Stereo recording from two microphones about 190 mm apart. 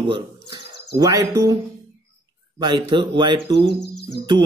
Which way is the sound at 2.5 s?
25° right (ahead or behind).